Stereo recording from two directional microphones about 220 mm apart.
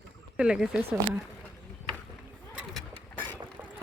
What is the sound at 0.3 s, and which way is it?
Speech, 5° right (ahead or behind).